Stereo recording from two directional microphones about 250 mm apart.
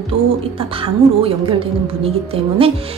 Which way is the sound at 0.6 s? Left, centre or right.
Right.